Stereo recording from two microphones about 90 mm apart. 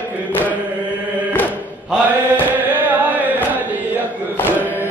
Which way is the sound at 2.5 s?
20° right (ahead or behind).